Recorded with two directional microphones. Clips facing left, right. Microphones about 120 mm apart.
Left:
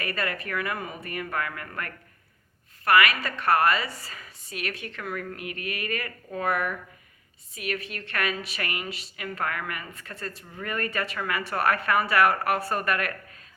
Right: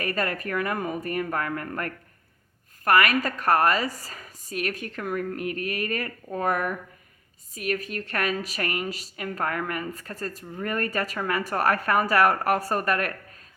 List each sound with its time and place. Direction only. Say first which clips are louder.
0.0 s speech: right 3 dB; 40° right (ahead or behind)